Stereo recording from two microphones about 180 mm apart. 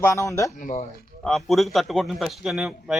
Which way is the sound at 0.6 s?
45° left (ahead or behind).